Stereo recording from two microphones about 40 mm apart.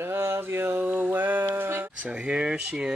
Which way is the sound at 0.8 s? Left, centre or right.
Right.